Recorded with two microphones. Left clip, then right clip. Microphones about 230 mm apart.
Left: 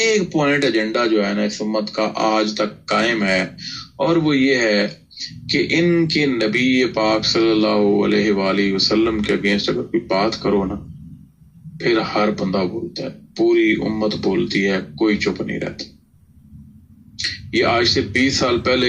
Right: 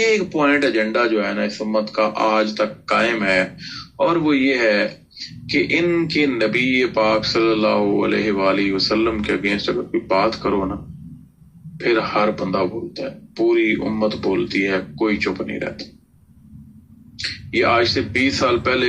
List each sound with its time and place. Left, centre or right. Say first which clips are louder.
0.0 s speech: even; left
11.8 s speech: even; left
17.2 s speech: left 1 dB; left